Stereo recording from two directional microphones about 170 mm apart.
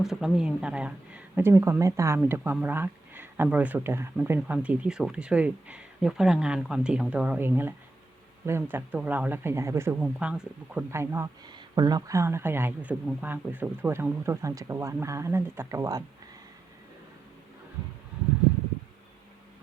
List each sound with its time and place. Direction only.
0.0 s speech: centre (ahead or behind); by 16.0 s 20° right (ahead or behind)